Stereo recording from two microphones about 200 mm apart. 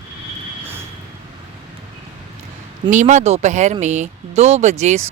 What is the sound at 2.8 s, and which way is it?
Speech, 40° right (ahead or behind).